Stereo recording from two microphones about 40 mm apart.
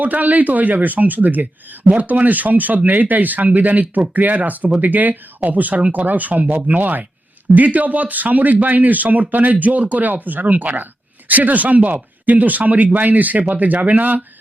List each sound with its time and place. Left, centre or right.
0.0 s speech: right